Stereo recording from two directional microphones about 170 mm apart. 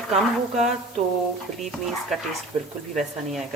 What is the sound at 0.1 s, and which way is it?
Speech, 45° right (ahead or behind).